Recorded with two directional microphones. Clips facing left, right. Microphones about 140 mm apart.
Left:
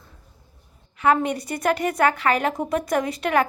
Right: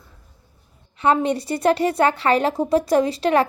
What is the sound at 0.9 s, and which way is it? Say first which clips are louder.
A woman's voice: right 2 dB; 30° right (ahead or behind).